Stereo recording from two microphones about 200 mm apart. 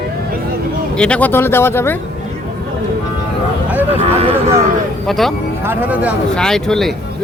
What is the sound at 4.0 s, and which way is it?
Speech, 30° right (ahead or behind).